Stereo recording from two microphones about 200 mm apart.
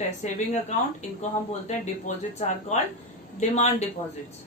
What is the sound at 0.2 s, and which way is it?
Speech, 35° left (ahead or behind).